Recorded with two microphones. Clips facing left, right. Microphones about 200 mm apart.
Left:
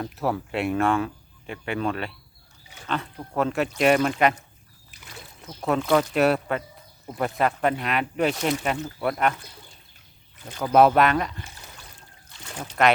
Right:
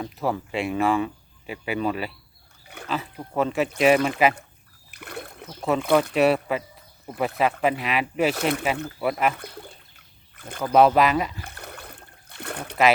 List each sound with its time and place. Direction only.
0.0 s speech: centre (ahead or behind)
4.9 s a sound: 60° right (ahead or behind)
5.6 s speech: centre (ahead or behind)
8.4 s speech: 60° right (ahead or behind)
9.0 s speech: 5° right (ahead or behind)
9.3 s speech: 60° right (ahead or behind)
10.6 s speech: centre (ahead or behind)
11.4 s a sound: 60° right (ahead or behind)